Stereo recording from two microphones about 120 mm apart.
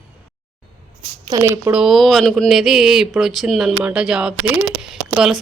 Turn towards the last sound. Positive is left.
turn(degrees=-5)  # may be behind; listen again after turning